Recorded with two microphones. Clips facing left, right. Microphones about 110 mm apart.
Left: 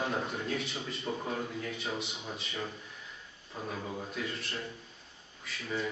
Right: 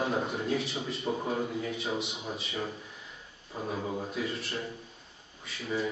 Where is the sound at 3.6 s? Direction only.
15° right (ahead or behind).